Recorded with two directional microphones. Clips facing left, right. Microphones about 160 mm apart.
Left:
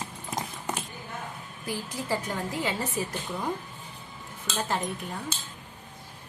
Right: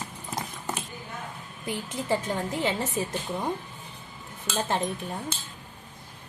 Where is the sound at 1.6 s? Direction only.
20° right (ahead or behind).